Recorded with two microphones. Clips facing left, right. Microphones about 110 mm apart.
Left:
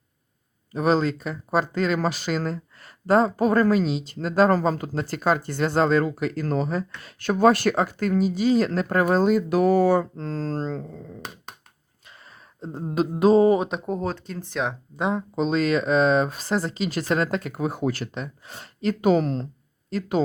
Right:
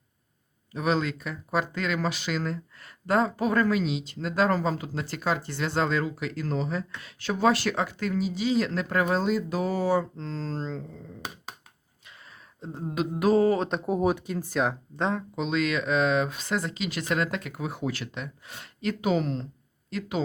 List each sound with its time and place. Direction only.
0.7 s speech: 40° left (ahead or behind)
12.0 s a sound: 35° left (ahead or behind); by 13.7 s 20° left (ahead or behind)
13.7 s speech: centre (ahead or behind)
14.9 s speech: 10° left (ahead or behind)
15.4 s speech: 35° left (ahead or behind)